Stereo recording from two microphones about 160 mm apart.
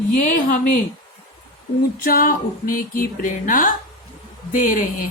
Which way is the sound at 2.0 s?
60° left (ahead or behind).